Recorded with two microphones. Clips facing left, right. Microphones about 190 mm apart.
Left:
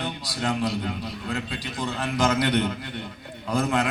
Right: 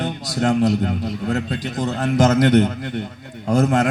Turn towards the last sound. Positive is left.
turn(degrees=-45)  # may be behind; listen again after turning